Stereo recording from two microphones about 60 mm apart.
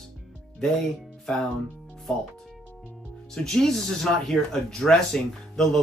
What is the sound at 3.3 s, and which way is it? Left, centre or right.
Speech, centre.